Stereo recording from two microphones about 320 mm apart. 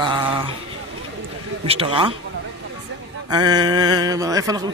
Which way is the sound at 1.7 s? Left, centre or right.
Centre.